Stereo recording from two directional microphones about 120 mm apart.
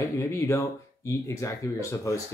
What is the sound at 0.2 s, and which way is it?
Speech, 25° left (ahead or behind).